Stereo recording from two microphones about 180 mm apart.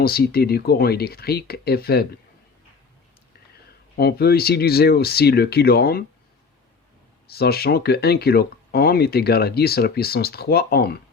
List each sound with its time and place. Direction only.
0.0 s speech: 60° left (ahead or behind)
3.9 s speech: 60° left (ahead or behind)
7.3 s speech: 60° left (ahead or behind)